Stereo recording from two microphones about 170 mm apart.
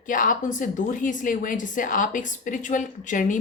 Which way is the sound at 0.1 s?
50° left (ahead or behind).